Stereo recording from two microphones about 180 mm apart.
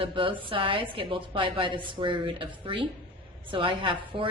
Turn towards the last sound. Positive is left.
turn(degrees=-30)  # may be behind; listen again after turning